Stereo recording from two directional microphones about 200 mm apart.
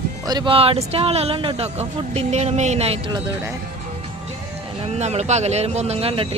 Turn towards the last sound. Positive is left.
turn(degrees=-30)  # may be behind; listen again after turning